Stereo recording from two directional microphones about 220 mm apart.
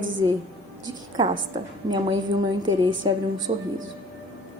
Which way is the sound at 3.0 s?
20° right (ahead or behind).